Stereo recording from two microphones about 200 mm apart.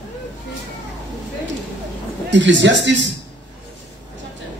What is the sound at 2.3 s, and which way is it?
Speech, 65° right (ahead or behind).